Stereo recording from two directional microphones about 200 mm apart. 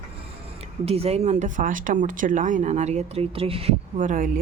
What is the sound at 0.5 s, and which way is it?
Speech, 30° right (ahead or behind).